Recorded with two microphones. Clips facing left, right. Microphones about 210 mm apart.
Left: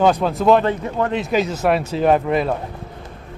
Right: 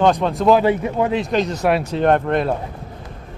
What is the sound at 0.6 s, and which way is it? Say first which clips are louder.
Speech: right 3 dB; 10° right (ahead or behind).